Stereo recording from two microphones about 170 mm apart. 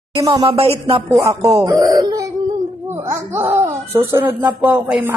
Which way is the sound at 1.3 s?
20° right (ahead or behind).